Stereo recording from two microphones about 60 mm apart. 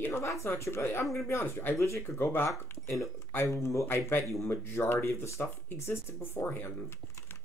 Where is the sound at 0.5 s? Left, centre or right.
Left.